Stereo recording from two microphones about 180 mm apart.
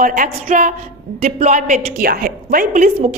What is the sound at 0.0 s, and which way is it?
A woman's voice, 50° right (ahead or behind).